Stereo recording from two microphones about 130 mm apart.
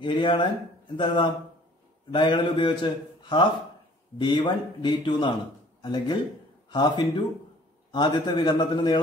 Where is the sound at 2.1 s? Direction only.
35° left (ahead or behind).